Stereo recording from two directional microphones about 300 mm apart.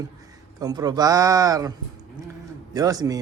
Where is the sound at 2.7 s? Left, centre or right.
Centre.